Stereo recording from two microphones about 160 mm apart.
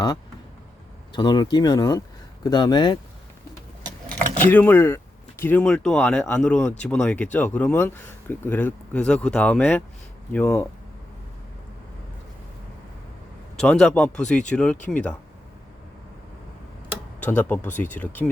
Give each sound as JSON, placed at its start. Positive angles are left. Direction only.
{"t": 1.1, "sound": "speech", "side_deg": 30}
{"t": 4.4, "sound": "speech", "side_deg": 10}
{"t": 13.6, "sound": "speech", "side_deg": 5}
{"t": 17.2, "sound": "speech", "side_deg": 10}
{"t": 18.2, "sound": "speech", "side_deg": -5}